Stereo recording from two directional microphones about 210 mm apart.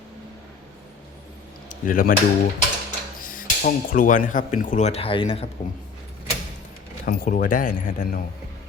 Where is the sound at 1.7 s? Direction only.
40° left (ahead or behind).